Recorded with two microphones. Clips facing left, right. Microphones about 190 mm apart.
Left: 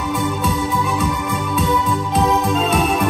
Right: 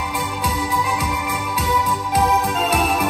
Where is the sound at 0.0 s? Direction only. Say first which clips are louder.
Left 5 dB; centre (ahead or behind).